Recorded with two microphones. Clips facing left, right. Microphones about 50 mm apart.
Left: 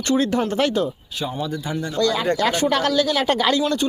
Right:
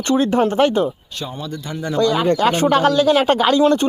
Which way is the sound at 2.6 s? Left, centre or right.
Right.